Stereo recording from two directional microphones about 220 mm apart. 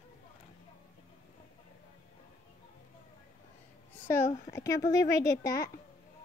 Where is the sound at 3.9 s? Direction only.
10° left (ahead or behind).